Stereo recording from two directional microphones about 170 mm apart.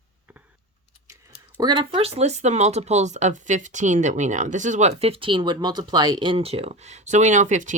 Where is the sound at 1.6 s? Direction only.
25° right (ahead or behind).